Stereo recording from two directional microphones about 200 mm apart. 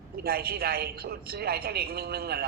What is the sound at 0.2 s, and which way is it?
A woman's voice, 50° right (ahead or behind).